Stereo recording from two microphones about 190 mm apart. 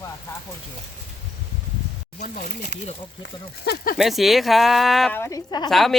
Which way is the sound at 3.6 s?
50° left (ahead or behind).